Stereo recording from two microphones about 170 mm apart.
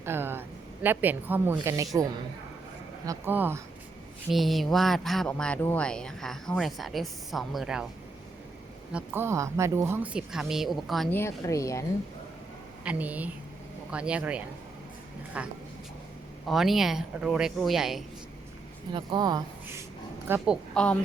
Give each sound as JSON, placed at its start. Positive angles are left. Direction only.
{"t": 0.0, "sound": "speech", "side_deg": -15}
{"t": 3.1, "sound": "speech", "side_deg": -10}
{"t": 4.3, "sound": "speech", "side_deg": 0}
{"t": 8.9, "sound": "speech", "side_deg": -10}
{"t": 11.1, "sound": "a woman's voice", "side_deg": 15}
{"t": 12.8, "sound": "speech", "side_deg": -10}
{"t": 18.9, "sound": "speech", "side_deg": -25}
{"t": 20.2, "sound": "speech", "side_deg": -15}
{"t": 20.7, "sound": "a woman's voice", "side_deg": 10}